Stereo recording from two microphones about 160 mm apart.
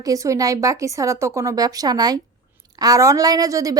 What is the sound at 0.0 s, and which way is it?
A woman's voice, 20° right (ahead or behind).